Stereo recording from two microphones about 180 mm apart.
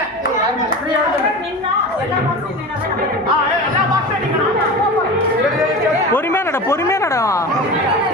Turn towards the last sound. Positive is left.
turn(degrees=15)  # may be behind; listen again after turning